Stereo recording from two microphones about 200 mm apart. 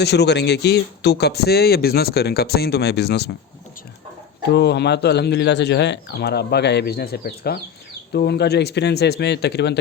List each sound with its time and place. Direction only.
0.0 s speech: 55° left (ahead or behind)
4.4 s speech: 55° left (ahead or behind)